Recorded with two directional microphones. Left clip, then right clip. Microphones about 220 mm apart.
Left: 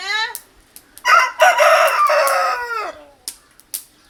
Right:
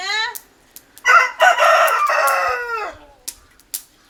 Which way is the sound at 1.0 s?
40° left (ahead or behind).